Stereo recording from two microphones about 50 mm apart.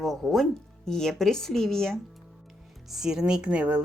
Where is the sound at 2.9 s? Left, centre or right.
Centre.